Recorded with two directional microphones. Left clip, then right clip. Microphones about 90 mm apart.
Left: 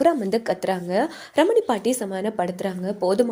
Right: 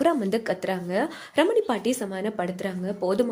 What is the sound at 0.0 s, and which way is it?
Speech, 10° left (ahead or behind).